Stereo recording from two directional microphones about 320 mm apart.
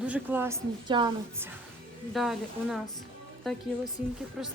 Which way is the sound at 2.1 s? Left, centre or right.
Centre.